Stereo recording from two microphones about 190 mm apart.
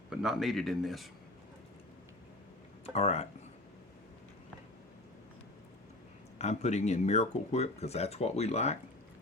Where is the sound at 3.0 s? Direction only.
35° left (ahead or behind).